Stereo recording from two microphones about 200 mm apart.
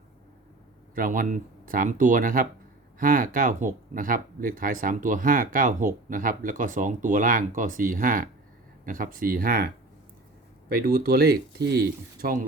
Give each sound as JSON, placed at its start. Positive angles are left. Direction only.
{"t": 0.9, "sound": "speech", "side_deg": -45}
{"t": 10.7, "sound": "speech", "side_deg": -45}